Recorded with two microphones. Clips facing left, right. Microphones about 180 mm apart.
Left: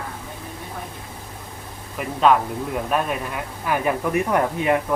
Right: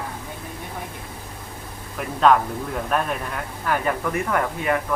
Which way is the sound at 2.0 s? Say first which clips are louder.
Even; 5° left (ahead or behind).